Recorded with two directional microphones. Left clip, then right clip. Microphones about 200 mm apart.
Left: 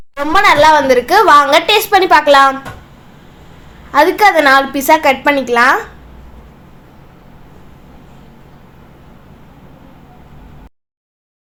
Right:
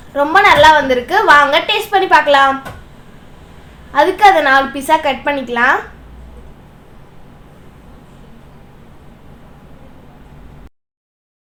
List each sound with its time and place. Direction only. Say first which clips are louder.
0.3 s a woman's voice: even; 45° left (ahead or behind)
3.9 s a woman's voice: even; 45° left (ahead or behind)